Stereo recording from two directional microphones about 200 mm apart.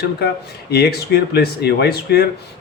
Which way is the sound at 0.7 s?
50° left (ahead or behind).